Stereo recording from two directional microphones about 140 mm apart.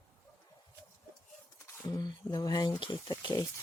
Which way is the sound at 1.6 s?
25° left (ahead or behind).